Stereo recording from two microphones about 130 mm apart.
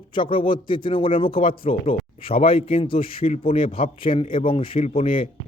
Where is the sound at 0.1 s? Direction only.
40° left (ahead or behind).